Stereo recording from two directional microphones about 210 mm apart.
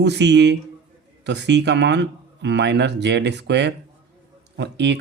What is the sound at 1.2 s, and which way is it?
Speech, 55° right (ahead or behind).